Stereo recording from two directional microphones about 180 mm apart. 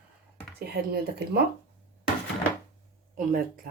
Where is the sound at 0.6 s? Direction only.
60° right (ahead or behind).